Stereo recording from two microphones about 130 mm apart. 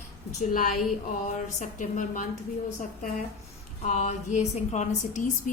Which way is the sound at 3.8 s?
65° left (ahead or behind).